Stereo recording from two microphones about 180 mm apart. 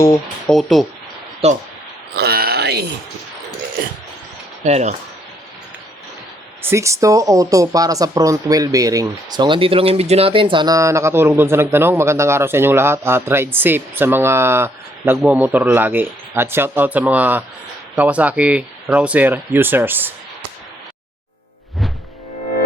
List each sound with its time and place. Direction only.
0.4 s speech: centre (ahead or behind)
1.4 s speech: 35° right (ahead or behind)
2.1 s a sound: 60° right (ahead or behind)
4.6 s speech: 40° right (ahead or behind)
6.6 s speech: 15° right (ahead or behind)